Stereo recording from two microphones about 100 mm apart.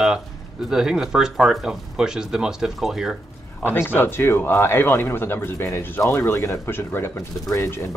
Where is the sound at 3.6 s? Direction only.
20° left (ahead or behind).